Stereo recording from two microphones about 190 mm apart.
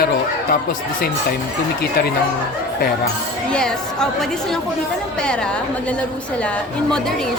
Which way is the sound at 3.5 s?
5° left (ahead or behind).